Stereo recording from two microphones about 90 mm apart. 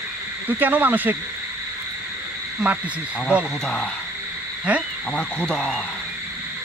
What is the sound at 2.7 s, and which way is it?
Speech, 15° right (ahead or behind).